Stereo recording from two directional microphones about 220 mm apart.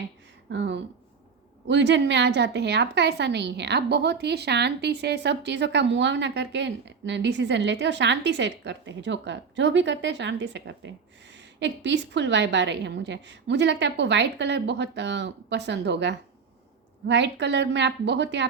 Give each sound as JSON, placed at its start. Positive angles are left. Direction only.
{"t": 0.5, "sound": "a woman's voice", "side_deg": -50}